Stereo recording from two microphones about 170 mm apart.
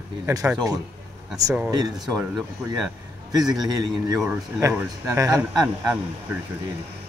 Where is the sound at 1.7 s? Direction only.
25° right (ahead or behind).